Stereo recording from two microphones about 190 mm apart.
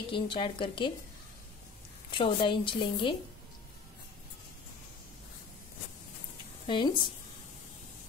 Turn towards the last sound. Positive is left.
turn(degrees=25)  # may be behind; listen again after turning